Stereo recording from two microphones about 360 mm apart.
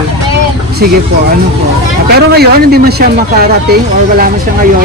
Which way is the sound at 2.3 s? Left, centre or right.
Right.